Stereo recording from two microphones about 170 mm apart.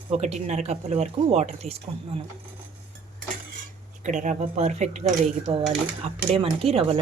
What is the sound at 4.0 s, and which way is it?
Speech, 45° right (ahead or behind).